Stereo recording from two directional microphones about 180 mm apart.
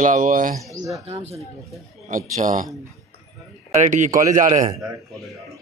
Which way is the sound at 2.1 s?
50° right (ahead or behind).